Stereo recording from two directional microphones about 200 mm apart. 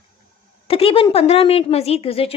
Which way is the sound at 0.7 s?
30° left (ahead or behind).